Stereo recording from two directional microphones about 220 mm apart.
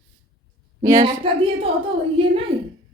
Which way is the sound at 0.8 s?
15° right (ahead or behind).